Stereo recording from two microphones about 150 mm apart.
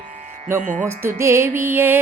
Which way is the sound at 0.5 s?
60° right (ahead or behind).